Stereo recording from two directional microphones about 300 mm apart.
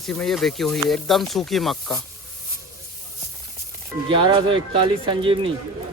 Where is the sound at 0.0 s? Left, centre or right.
Centre.